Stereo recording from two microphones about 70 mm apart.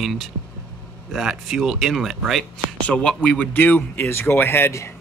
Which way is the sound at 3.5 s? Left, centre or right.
Left.